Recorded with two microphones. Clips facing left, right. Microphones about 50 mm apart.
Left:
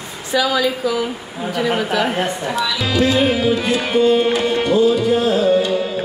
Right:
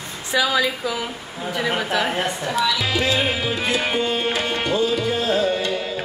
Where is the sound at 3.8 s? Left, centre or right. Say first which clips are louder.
Left 8 dB; centre.